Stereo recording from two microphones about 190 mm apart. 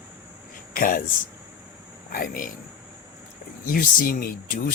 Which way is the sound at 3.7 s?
45° left (ahead or behind).